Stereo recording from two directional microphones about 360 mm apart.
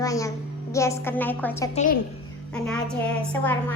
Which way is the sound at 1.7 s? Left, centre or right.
Left.